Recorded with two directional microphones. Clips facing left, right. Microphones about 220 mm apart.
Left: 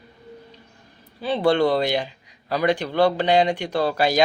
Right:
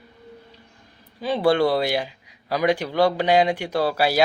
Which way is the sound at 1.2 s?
10° right (ahead or behind).